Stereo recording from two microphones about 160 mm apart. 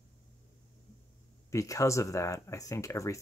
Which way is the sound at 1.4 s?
20° left (ahead or behind).